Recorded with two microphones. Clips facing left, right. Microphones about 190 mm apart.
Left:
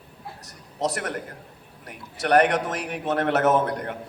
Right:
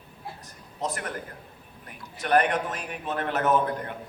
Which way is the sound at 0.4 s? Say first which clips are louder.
Left 6 dB; 75° left (ahead or behind).